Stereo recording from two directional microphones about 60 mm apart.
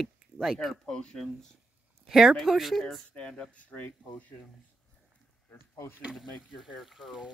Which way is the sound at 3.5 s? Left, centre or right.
Left.